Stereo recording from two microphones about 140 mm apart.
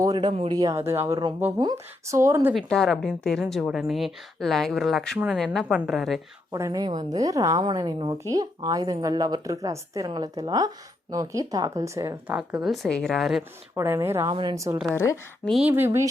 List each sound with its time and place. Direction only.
0.0 s a woman's voice: 30° right (ahead or behind)
2.6 s a woman's voice: 5° left (ahead or behind)
6.5 s a woman's voice: 25° right (ahead or behind)
12.3 s a woman's voice: 10° right (ahead or behind)
13.7 s speech: 15° right (ahead or behind)
14.3 s a woman's voice: 30° right (ahead or behind)
14.9 s a woman's voice: 20° left (ahead or behind)
15.4 s a woman's voice: 5° right (ahead or behind)
15.7 s speech: 20° right (ahead or behind)